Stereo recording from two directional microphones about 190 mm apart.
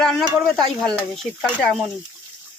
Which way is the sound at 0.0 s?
5° left (ahead or behind).